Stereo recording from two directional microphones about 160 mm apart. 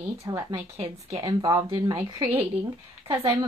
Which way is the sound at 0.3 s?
20° right (ahead or behind).